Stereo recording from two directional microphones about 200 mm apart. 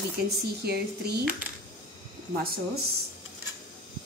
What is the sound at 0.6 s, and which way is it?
Speech, 55° right (ahead or behind).